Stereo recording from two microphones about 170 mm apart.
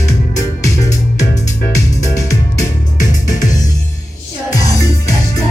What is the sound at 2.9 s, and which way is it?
Music, 45° left (ahead or behind).